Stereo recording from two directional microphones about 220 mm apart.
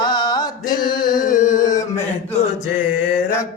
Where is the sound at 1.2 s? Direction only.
35° left (ahead or behind).